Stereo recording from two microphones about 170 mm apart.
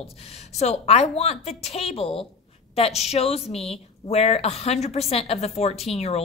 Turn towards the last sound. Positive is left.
turn(degrees=40)  # may be behind; listen again after turning